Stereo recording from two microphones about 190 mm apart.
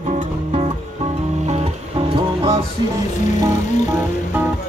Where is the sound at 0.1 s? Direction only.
35° right (ahead or behind).